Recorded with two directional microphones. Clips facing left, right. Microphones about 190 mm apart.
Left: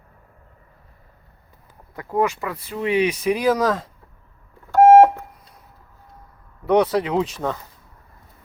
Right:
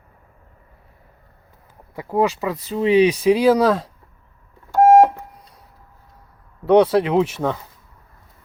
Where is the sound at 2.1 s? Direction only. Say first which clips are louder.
Right 2 dB; 20° right (ahead or behind).